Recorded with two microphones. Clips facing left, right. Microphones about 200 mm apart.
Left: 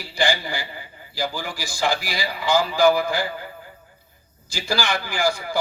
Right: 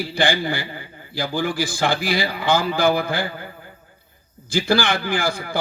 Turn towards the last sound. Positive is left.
turn(degrees=-55)  # may be behind; listen again after turning